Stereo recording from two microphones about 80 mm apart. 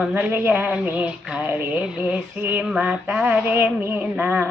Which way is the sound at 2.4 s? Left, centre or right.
Right.